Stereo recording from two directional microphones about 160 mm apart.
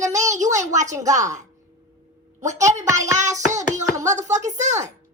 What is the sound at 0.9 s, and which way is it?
Speech, 20° right (ahead or behind).